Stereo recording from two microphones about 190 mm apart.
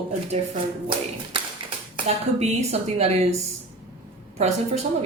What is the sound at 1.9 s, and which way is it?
Speech, 35° right (ahead or behind).